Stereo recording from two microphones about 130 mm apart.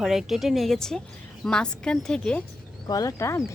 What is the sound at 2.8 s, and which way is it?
Speech, 25° left (ahead or behind).